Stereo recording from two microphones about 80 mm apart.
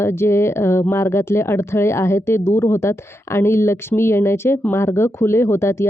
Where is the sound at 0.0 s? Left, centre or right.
Left.